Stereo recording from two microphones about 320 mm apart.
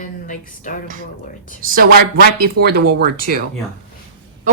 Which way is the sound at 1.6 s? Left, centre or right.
Right.